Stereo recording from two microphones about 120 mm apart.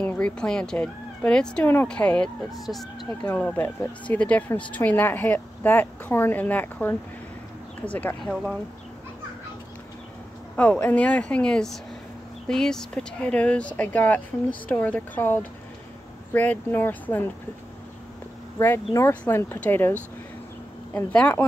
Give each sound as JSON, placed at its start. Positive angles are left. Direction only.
{"t": 0.0, "sound": "a woman's voice", "side_deg": 10}
{"t": 3.3, "sound": "a woman's voice", "side_deg": 15}
{"t": 8.2, "sound": "speech", "side_deg": 0}
{"t": 10.5, "sound": "a woman's voice", "side_deg": 10}
{"t": 18.9, "sound": "a woman's voice", "side_deg": 20}